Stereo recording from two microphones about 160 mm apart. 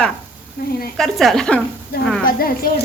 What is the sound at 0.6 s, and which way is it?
Speech, 65° left (ahead or behind).